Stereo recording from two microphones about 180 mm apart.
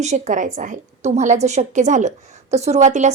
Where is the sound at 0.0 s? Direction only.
40° right (ahead or behind).